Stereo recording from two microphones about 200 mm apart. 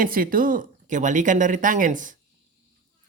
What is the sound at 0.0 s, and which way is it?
Speech, 45° right (ahead or behind).